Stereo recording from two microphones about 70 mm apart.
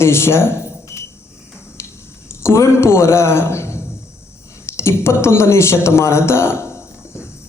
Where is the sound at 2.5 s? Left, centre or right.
Left.